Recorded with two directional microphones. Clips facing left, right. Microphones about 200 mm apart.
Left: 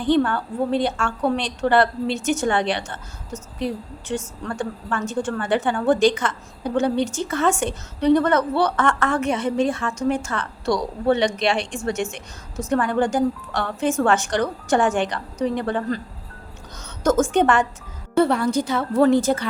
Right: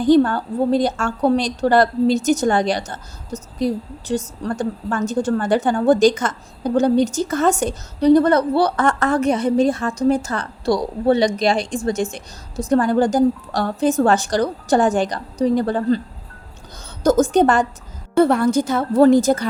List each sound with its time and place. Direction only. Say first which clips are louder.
0.0 s a woman's voice: right 5 dB; 40° right (ahead or behind)
17.0 s a woman's voice: right 4 dB; 35° right (ahead or behind)
18.2 s a woman's voice: right 4 dB; 50° right (ahead or behind)